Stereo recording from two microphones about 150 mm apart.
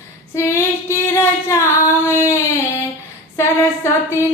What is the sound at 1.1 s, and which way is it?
Singing, 20° left (ahead or behind).